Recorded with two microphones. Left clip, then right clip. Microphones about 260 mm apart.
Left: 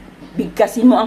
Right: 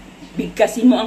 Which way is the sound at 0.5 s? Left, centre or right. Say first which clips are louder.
Left 2 dB; left.